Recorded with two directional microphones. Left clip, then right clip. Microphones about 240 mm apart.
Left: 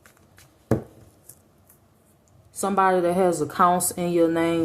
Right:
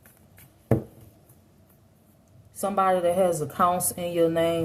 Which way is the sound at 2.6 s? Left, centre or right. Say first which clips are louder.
Left 2 dB; left.